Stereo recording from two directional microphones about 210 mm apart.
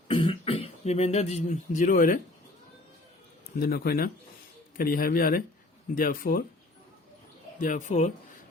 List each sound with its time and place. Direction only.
0.1 s speech: 25° left (ahead or behind)
3.6 s speech: 45° left (ahead or behind)
7.6 s speech: 35° left (ahead or behind)